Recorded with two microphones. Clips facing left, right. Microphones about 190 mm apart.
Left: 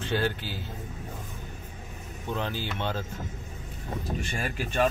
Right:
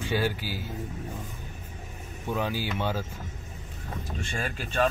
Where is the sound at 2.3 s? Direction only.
10° right (ahead or behind).